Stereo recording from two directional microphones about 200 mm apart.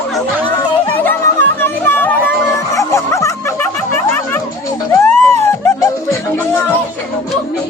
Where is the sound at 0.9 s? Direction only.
10° left (ahead or behind).